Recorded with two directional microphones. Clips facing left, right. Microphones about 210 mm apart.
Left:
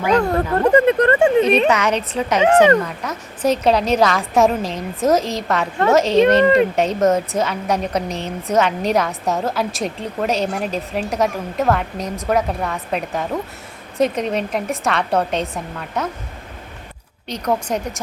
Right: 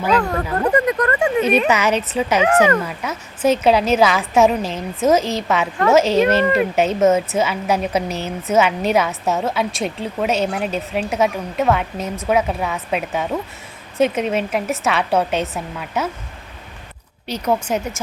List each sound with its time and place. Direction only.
0.6 s speech: 25° left (ahead or behind)
1.6 s a woman's voice: 5° right (ahead or behind)
2.4 s speech: 25° left (ahead or behind)
2.8 s a woman's voice: 5° right (ahead or behind)
17.2 s a woman's voice: 5° right (ahead or behind)